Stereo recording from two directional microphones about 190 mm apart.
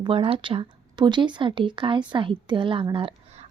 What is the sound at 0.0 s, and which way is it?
A woman's voice, 30° right (ahead or behind).